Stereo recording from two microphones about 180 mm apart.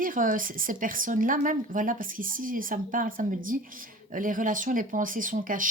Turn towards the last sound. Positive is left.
turn(degrees=-50)  # may be behind; listen again after turning